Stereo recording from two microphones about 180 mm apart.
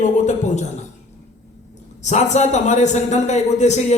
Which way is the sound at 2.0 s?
40° left (ahead or behind).